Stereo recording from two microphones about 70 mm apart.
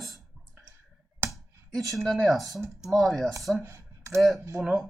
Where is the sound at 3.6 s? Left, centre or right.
Right.